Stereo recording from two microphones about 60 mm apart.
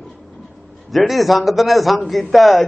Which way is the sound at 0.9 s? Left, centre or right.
Centre.